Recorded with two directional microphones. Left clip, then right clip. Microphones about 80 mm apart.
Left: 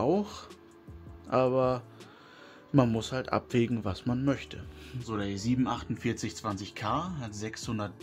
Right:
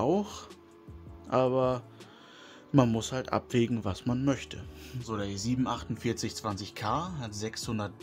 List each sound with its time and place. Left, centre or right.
0.0 s speech: right